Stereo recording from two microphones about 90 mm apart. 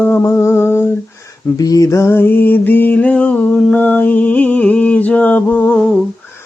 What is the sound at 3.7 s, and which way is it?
Music, 20° left (ahead or behind).